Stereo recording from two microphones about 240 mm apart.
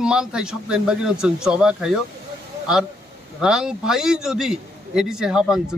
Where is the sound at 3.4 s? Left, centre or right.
Centre.